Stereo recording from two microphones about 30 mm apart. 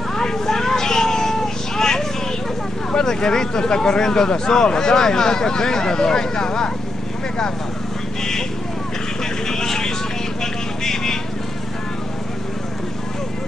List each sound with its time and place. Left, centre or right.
0.1 s vehicle: centre
2.9 s speech: left
8.2 s speech: centre
9.5 s vehicle: centre
10.4 s run: centre